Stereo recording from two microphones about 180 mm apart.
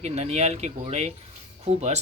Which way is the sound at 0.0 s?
35° right (ahead or behind).